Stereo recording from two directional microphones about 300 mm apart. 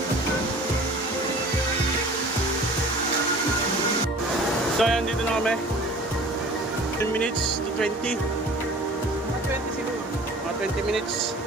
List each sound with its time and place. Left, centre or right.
4.8 s speech: centre